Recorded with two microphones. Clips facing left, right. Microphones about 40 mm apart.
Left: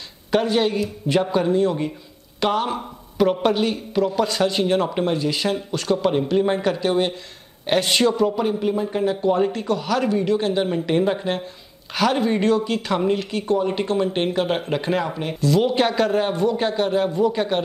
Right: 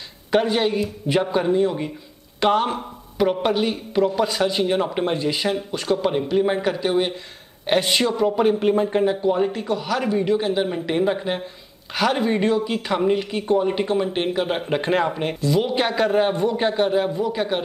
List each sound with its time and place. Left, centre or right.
0.3 s speech: centre
3.2 s speech: centre
5.0 s speech: right
5.3 s speech: centre
8.4 s speech: right
9.2 s speech: centre
14.8 s speech: right
15.4 s speech: centre